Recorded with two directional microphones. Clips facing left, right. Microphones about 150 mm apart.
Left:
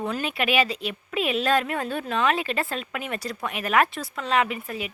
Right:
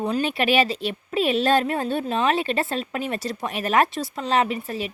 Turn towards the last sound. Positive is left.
turn(degrees=-30)  # may be behind; listen again after turning